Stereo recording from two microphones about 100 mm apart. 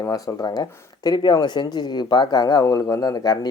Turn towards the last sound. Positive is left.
turn(degrees=40)  # may be behind; listen again after turning